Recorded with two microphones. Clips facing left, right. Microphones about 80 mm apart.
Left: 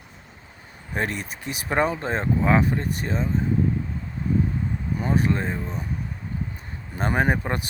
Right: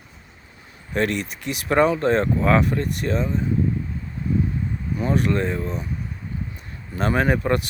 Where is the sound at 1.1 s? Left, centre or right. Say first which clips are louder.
Right 5 dB; left.